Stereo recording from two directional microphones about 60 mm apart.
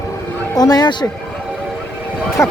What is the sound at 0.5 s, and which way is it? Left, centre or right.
Speech, left.